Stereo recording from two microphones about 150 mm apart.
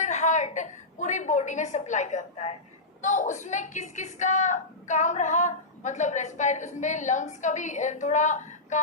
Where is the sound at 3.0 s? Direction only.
55° left (ahead or behind).